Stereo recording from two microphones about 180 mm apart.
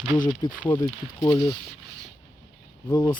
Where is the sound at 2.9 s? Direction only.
25° left (ahead or behind).